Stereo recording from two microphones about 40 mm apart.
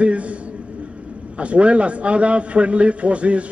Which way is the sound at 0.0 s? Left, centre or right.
Right.